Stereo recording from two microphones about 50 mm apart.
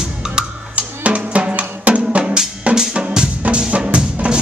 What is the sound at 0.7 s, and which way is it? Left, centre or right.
Drum, right.